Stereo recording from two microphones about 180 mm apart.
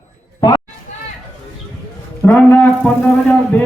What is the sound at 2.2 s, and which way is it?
A man's voice, 10° left (ahead or behind).